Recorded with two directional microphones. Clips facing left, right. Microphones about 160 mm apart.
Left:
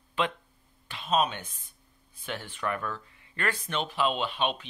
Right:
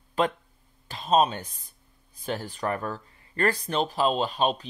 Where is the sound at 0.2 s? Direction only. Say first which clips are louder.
Right 4 dB; 40° right (ahead or behind).